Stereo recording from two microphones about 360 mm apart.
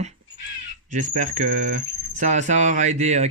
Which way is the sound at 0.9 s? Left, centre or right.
Centre.